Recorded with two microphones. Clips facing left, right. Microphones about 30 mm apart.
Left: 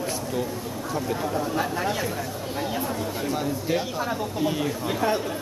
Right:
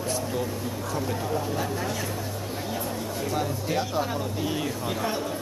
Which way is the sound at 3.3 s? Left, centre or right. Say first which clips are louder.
Left 2 dB; centre.